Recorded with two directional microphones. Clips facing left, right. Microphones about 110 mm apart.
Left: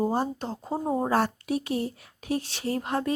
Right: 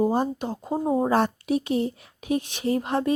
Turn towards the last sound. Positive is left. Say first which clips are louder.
# right 4 dB
turn(degrees=-20)  # may be behind; listen again after turning